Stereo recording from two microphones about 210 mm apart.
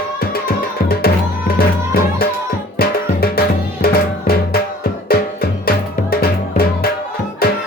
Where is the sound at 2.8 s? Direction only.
45° left (ahead or behind).